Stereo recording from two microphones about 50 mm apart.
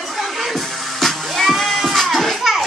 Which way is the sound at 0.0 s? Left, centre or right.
Centre.